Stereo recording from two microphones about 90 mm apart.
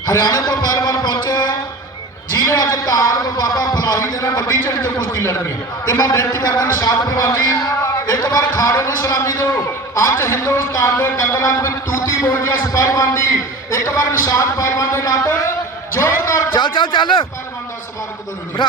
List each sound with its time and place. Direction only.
0.0 s a man's voice: 50° left (ahead or behind); by 15.5 s 30° left (ahead or behind)
16.0 s a sound: 30° left (ahead or behind)
16.6 s a man's voice: 60° left (ahead or behind)